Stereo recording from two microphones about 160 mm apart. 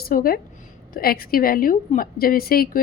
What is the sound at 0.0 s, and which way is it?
A woman's voice, 65° left (ahead or behind).